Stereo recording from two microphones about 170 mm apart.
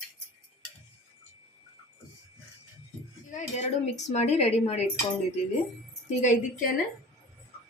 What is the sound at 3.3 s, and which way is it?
A woman's voice, 45° left (ahead or behind).